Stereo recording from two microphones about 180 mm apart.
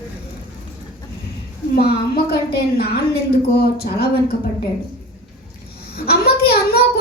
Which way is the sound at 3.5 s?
60° left (ahead or behind).